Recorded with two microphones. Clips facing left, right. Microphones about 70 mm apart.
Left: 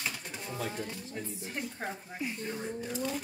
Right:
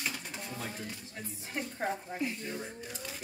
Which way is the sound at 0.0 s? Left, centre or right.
Centre.